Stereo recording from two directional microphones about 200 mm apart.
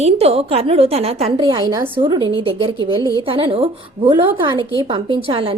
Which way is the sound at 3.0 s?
15° left (ahead or behind).